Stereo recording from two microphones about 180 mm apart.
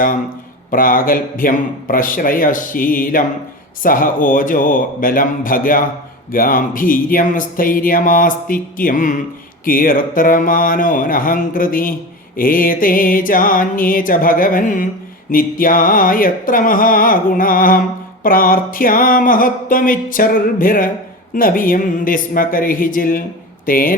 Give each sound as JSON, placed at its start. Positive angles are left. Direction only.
{"t": 0.7, "sound": "speech", "side_deg": 50}